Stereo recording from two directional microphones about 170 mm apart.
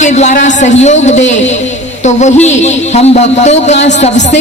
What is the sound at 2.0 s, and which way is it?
A man's voice, 40° left (ahead or behind).